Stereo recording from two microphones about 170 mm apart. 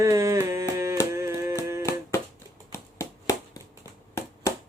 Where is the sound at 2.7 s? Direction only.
15° left (ahead or behind).